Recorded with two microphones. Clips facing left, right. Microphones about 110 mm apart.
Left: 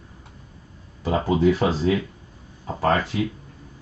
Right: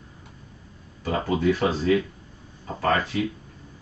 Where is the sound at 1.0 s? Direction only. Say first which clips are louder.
Left 3 dB; 20° left (ahead or behind).